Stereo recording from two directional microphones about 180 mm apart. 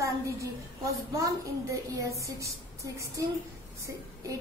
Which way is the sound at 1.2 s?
20° right (ahead or behind).